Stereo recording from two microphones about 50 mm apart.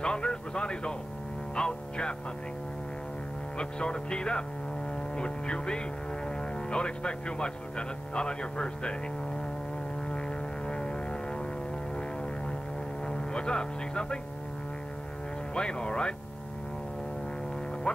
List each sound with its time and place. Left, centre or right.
0.0 s music: centre
1.5 s speech: centre
3.5 s speech: centre
10.7 s a sound: centre
13.0 s vehicle: centre
15.5 s speech: centre
17.9 s speech: left